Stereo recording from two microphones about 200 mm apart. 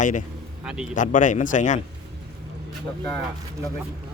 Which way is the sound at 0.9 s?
40° left (ahead or behind).